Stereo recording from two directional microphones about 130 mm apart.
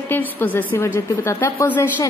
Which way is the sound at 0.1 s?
15° left (ahead or behind).